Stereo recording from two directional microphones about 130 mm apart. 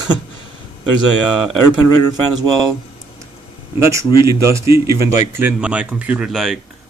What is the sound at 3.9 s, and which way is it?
Speech, 20° right (ahead or behind).